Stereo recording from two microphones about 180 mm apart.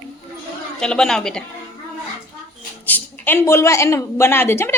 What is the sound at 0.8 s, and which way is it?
Speech, 5° left (ahead or behind).